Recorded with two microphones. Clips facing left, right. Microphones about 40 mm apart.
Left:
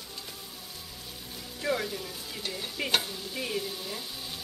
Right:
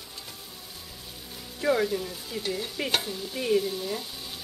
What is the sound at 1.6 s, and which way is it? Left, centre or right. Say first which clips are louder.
Speech: right 6 dB; centre.